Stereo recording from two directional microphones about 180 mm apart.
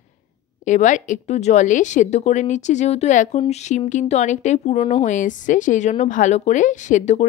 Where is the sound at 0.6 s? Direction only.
45° left (ahead or behind).